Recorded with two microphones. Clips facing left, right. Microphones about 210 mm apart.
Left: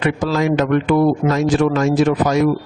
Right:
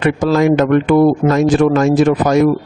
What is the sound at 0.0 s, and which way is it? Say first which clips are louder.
Speech: right 5 dB; 50° right (ahead or behind).